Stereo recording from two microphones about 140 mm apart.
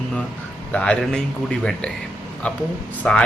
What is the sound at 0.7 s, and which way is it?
Speech, 10° left (ahead or behind).